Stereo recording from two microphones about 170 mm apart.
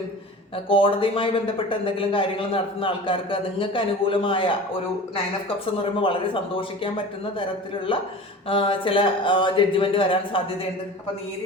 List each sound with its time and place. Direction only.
0.5 s a man's voice: 30° left (ahead or behind)
5.8 s a man's voice: 30° left (ahead or behind)